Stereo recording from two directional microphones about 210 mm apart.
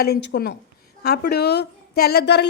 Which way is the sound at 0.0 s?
50° left (ahead or behind).